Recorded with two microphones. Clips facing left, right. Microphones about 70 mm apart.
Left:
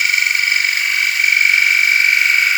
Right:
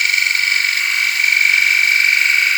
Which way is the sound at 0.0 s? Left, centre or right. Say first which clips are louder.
Left 1 dB; centre.